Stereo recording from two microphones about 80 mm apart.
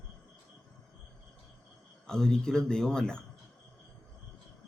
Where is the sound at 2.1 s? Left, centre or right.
Centre.